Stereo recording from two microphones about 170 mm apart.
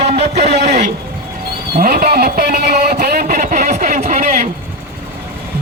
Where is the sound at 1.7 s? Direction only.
60° right (ahead or behind).